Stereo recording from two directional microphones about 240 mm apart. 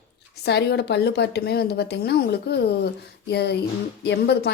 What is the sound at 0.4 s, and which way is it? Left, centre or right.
A woman's voice, left.